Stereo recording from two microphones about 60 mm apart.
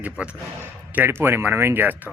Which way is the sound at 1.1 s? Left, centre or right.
Right.